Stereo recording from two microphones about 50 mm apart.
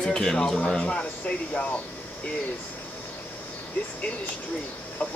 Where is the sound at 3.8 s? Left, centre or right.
Left.